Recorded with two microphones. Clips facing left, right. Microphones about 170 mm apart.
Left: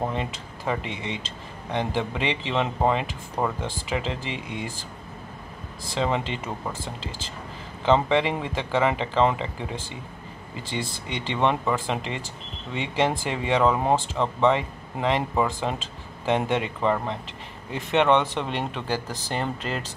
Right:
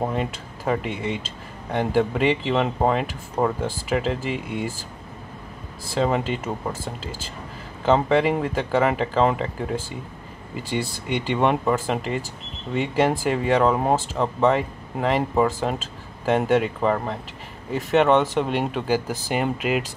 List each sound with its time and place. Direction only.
0.0 s speech: 5° right (ahead or behind)
0.8 s speech: 50° right (ahead or behind)
1.2 s speech: 5° right (ahead or behind)
5.9 s speech: 5° right (ahead or behind)